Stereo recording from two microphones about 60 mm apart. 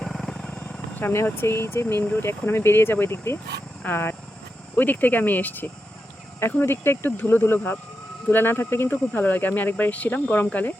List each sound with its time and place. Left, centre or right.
0.0 s vehicle: centre
0.4 s vehicle: left
1.1 s speech: left
8.9 s speech: left